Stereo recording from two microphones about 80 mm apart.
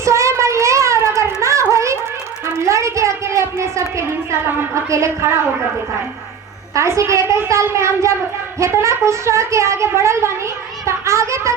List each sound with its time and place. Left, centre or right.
0.0 s child singing: right
2.6 s a sound: right
6.7 s speech: right